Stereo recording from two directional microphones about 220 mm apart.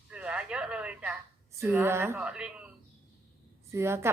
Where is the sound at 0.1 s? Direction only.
5° right (ahead or behind).